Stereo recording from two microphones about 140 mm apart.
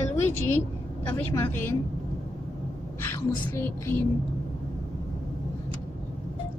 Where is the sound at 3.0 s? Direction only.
15° left (ahead or behind).